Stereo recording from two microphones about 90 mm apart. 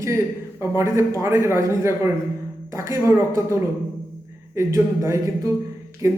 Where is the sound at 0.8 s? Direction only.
30° right (ahead or behind).